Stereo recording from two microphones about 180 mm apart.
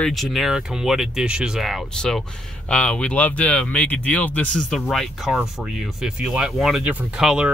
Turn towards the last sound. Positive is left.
turn(degrees=-5)  # may be behind; listen again after turning